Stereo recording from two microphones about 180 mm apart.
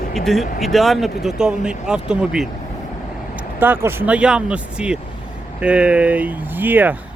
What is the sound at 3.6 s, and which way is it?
Speech, 10° right (ahead or behind).